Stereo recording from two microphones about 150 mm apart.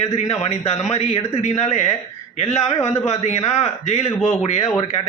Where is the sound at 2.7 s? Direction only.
20° left (ahead or behind).